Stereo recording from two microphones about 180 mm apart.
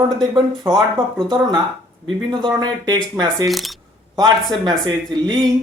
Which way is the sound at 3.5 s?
Centre (ahead or behind).